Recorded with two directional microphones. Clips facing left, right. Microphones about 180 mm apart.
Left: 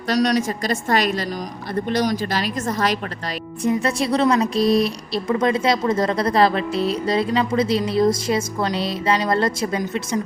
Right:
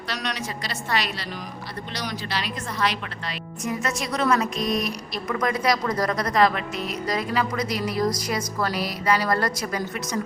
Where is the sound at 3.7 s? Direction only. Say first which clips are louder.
Left 8 dB; 30° left (ahead or behind).